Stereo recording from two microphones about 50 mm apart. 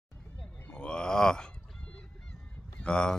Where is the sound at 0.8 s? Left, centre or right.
Centre.